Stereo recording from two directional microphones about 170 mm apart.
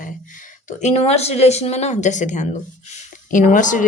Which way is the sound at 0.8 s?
40° left (ahead or behind).